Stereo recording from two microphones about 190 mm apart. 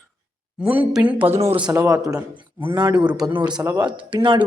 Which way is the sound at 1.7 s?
15° right (ahead or behind).